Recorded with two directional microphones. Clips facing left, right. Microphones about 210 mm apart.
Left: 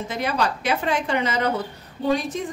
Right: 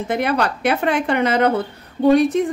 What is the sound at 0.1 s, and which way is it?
A woman's voice, 60° right (ahead or behind).